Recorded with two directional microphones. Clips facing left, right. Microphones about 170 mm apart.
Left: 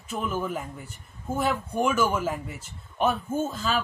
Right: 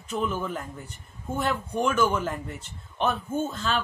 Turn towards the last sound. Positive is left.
turn(degrees=5)  # may be behind; listen again after turning